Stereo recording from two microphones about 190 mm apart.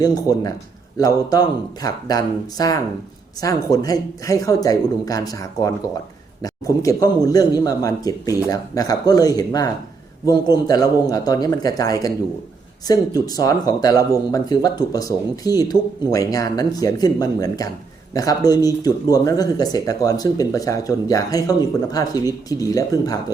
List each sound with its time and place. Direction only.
0.0 s speech: 20° left (ahead or behind)